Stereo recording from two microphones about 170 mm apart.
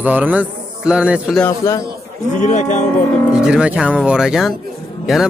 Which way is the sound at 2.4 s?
45° left (ahead or behind).